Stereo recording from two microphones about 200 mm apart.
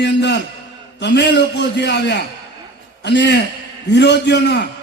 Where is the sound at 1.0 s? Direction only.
60° left (ahead or behind).